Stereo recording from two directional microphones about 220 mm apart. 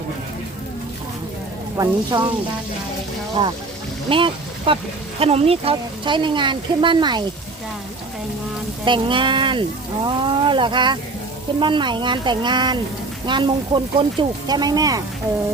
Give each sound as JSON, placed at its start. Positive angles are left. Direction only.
{"t": 1.7, "sound": "speech", "side_deg": -15}
{"t": 3.4, "sound": "speech", "side_deg": -25}
{"t": 8.8, "sound": "speech", "side_deg": -20}